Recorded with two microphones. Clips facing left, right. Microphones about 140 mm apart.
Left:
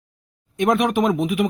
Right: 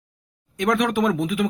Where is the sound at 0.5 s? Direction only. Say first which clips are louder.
Left 2 dB; 25° left (ahead or behind).